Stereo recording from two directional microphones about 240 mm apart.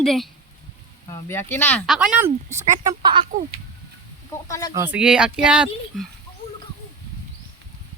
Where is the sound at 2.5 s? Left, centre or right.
Right.